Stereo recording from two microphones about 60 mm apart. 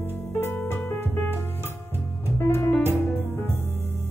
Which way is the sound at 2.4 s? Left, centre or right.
Left.